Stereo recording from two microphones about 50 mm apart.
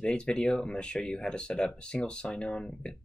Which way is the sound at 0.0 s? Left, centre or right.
Centre.